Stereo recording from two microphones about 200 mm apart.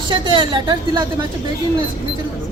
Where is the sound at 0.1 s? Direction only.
25° right (ahead or behind).